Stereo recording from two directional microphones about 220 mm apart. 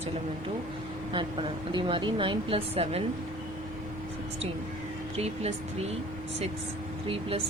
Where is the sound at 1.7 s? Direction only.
20° right (ahead or behind).